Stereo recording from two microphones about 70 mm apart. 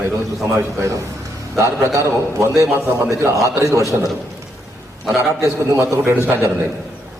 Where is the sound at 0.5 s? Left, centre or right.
Right.